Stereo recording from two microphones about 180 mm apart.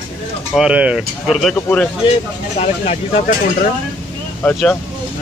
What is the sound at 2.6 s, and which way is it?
Speech, 35° left (ahead or behind).